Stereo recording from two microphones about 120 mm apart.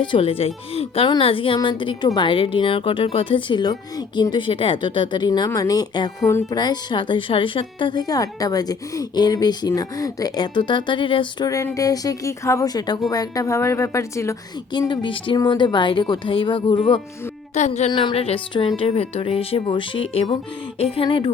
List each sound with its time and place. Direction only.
0.0 s speech: 45° left (ahead or behind)
6.2 s a woman's voice: 25° left (ahead or behind)
6.6 s speech: 40° left (ahead or behind)
11.4 s a woman's voice: 25° left (ahead or behind)
14.7 s speech: 40° left (ahead or behind)
17.5 s speech: 80° left
17.9 s speech: 50° left (ahead or behind)